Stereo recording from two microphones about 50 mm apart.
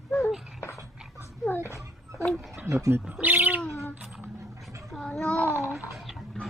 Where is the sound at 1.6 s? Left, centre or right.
Left.